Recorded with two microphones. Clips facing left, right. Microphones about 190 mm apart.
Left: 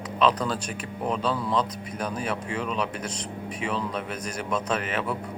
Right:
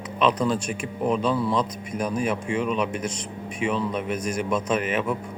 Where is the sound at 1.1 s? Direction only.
10° right (ahead or behind).